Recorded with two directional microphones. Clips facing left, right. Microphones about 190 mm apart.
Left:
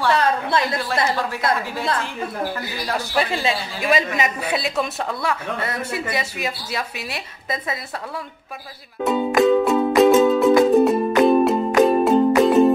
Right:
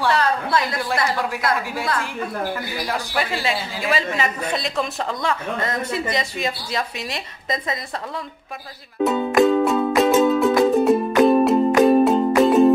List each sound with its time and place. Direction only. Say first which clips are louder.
0.5 s a woman's voice: even; 25° left (ahead or behind)
3.2 s a woman's voice: left 3 dB; 20° left (ahead or behind)
4.2 s a woman's voice: left 1 dB; 5° left (ahead or behind)
9.0 s music: even; centre (ahead or behind)